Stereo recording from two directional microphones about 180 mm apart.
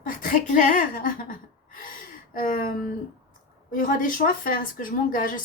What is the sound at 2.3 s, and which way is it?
A woman's voice, 50° left (ahead or behind).